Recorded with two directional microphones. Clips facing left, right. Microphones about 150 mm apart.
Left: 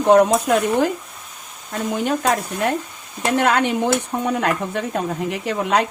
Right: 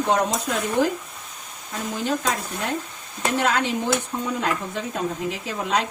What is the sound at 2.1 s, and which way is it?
Speech, 60° left (ahead or behind).